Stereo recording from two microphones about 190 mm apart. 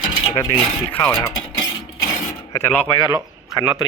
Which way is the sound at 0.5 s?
5° left (ahead or behind).